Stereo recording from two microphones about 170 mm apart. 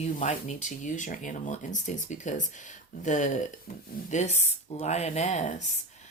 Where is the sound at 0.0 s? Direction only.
45° left (ahead or behind).